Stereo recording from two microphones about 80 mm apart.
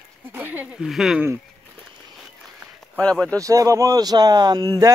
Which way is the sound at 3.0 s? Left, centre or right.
Centre.